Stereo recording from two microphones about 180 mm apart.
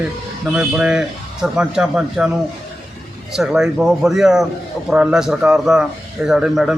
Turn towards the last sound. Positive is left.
turn(degrees=-5)  # may be behind; listen again after turning